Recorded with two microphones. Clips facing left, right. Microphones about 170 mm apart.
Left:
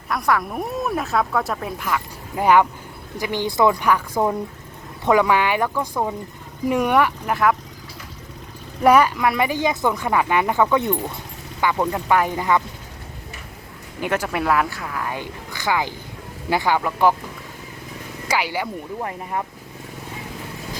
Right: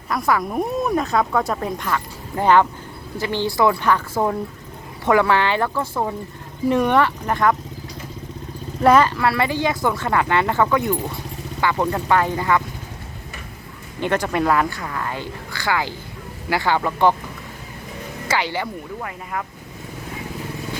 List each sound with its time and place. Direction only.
0.1 s speech: centre (ahead or behind)
8.8 s speech: 10° left (ahead or behind)
11.6 s speech: 10° left (ahead or behind)
14.0 s speech: 5° left (ahead or behind)
15.1 s speech: 15° left (ahead or behind)
18.3 s speech: 10° left (ahead or behind)
19.0 s speech: 30° left (ahead or behind)